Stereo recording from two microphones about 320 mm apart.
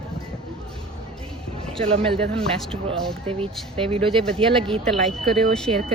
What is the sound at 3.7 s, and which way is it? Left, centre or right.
Speech, centre.